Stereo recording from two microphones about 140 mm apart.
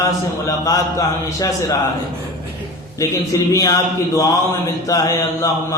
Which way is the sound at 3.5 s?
25° left (ahead or behind).